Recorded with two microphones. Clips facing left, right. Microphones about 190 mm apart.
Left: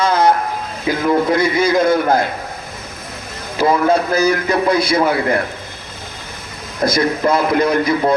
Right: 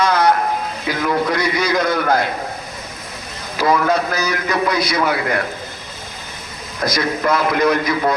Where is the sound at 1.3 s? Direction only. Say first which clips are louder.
Left 4 dB; 50° left (ahead or behind).